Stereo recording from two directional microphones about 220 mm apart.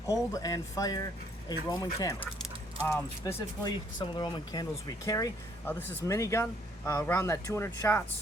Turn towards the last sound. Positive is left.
turn(degrees=10)  # may be behind; listen again after turning